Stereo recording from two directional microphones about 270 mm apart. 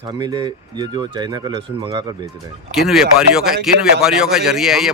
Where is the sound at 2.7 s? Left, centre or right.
Centre.